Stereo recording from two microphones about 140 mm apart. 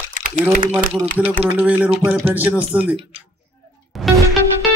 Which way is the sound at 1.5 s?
10° right (ahead or behind).